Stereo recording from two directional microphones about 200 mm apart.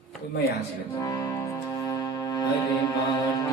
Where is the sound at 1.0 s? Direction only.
20° left (ahead or behind).